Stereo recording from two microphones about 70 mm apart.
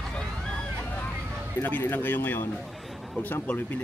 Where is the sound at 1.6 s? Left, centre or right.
Left.